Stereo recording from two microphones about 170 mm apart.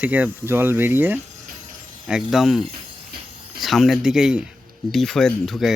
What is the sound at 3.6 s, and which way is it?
Speech, centre (ahead or behind).